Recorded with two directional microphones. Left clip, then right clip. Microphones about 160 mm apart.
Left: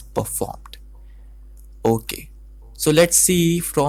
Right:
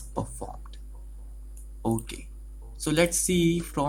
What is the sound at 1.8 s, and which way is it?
Speech, 40° left (ahead or behind).